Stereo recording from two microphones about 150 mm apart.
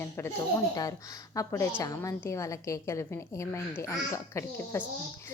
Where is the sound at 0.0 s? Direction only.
15° left (ahead or behind).